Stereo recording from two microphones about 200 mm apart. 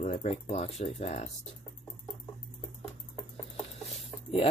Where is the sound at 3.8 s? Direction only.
30° left (ahead or behind).